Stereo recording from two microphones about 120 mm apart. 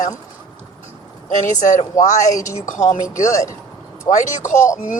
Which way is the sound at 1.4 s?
90° left.